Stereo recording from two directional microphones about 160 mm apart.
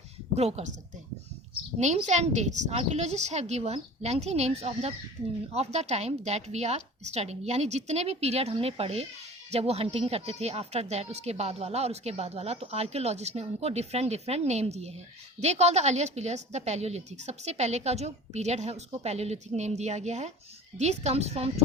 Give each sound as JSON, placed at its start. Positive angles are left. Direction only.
{"t": 0.3, "sound": "speech", "side_deg": -40}
{"t": 1.8, "sound": "a woman's voice", "side_deg": -45}
{"t": 5.2, "sound": "speech", "side_deg": -20}
{"t": 5.5, "sound": "a woman's voice", "side_deg": -45}